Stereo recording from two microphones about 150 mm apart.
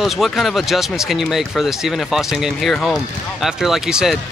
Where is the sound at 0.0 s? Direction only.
Centre (ahead or behind).